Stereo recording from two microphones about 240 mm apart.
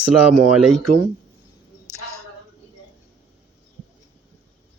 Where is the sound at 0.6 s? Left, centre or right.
Centre.